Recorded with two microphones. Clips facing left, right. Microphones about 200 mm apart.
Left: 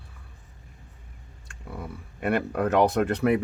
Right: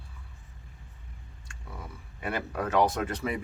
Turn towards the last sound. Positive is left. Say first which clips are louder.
# left 9 dB
turn(degrees=65)  # may be behind; listen again after turning